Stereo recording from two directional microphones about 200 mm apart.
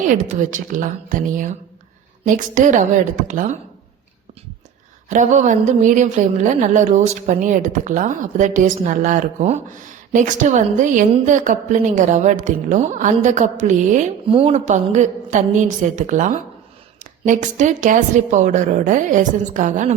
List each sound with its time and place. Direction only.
0.1 s a woman's voice: 40° right (ahead or behind)
5.0 s a woman's voice: 35° right (ahead or behind)